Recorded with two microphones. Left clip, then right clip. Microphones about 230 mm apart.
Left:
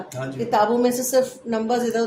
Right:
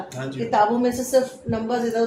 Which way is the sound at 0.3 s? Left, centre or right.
Left.